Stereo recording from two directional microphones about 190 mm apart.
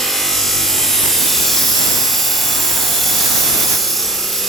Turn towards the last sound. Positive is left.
turn(degrees=0)  # may be behind; listen again after turning